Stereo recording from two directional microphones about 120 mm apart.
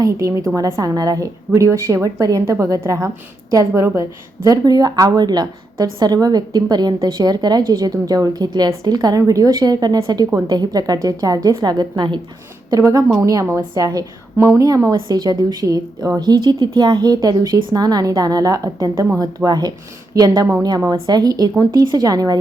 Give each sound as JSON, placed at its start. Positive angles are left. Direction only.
{"t": 0.0, "sound": "a woman's voice", "side_deg": -25}
{"t": 12.7, "sound": "a woman's voice", "side_deg": -30}